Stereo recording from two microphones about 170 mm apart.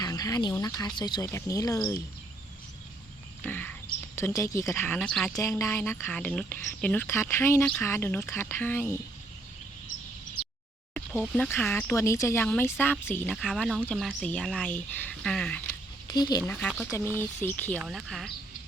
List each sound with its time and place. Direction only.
0.0 s speech: 20° left (ahead or behind)
3.4 s speech: 10° left (ahead or behind)
5.4 s speech: 20° left (ahead or behind)
11.2 s speech: 5° left (ahead or behind)
13.3 s speech: centre (ahead or behind)
16.0 s speech: 25° left (ahead or behind)
16.5 s speech: 5° left (ahead or behind)
17.8 s speech: centre (ahead or behind)